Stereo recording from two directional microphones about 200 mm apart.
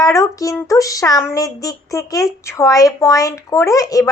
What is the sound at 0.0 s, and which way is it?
A woman's voice, 15° left (ahead or behind).